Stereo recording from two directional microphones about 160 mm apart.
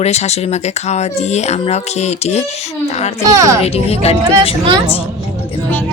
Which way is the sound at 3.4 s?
20° right (ahead or behind).